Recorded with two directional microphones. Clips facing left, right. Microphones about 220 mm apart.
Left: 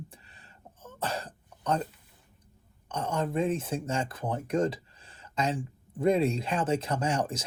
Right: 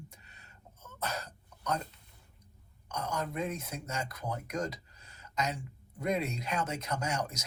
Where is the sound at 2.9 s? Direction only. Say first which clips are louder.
Left 5 dB; 30° left (ahead or behind).